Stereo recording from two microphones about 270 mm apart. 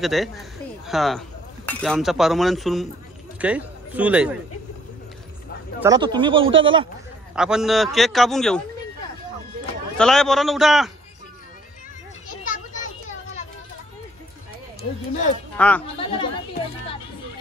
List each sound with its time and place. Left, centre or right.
0.0 s a man's voice: centre
5.8 s speech: centre
7.3 s a man's voice: centre
9.9 s a man's voice: centre
15.5 s speech: centre
16.0 s speech: centre